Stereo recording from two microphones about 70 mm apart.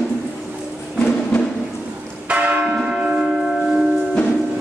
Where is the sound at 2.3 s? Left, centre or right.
Centre.